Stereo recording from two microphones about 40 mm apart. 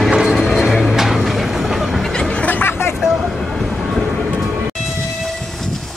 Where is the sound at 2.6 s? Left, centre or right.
Left.